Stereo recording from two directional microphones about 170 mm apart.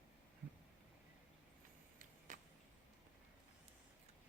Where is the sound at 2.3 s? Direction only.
50° right (ahead or behind).